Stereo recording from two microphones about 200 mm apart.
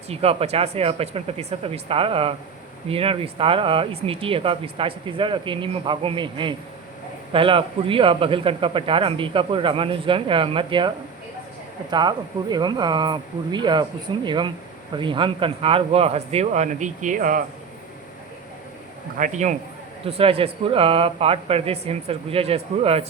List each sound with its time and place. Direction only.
0.1 s speech: 30° right (ahead or behind)
19.1 s speech: 40° right (ahead or behind)